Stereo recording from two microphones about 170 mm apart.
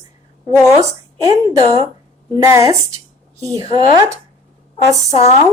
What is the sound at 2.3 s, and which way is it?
A woman's voice, 20° right (ahead or behind).